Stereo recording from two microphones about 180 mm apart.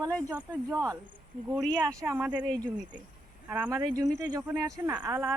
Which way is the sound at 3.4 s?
10° right (ahead or behind).